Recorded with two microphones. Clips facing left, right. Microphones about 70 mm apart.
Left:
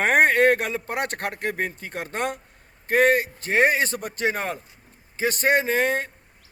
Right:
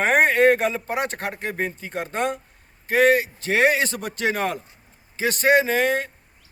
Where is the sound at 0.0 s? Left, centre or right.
Left.